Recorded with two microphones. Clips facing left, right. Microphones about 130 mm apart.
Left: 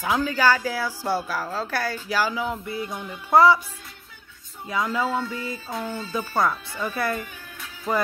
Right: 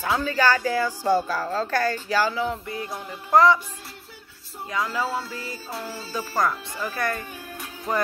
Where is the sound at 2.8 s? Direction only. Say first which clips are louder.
Left 1 dB; 35° right (ahead or behind).